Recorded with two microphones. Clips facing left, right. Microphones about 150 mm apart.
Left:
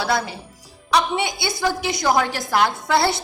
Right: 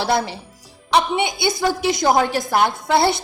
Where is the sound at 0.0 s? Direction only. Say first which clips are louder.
Right 2 dB; 25° right (ahead or behind).